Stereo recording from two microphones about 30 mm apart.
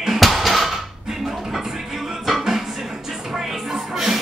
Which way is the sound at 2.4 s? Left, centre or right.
Centre.